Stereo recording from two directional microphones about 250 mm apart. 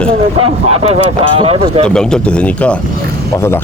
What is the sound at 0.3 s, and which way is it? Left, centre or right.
Speech, right.